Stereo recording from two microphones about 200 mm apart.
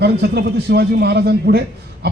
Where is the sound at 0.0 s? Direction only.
55° right (ahead or behind).